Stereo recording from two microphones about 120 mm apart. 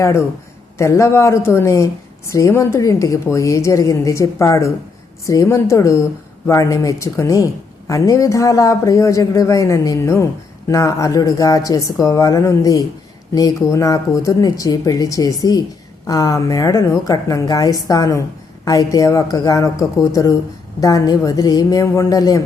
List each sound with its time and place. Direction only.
0.0 s a woman's voice: 20° left (ahead or behind)